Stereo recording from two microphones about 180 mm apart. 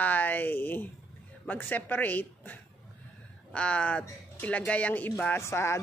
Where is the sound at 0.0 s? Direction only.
10° left (ahead or behind).